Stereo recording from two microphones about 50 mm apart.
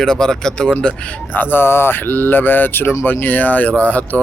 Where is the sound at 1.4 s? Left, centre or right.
Left.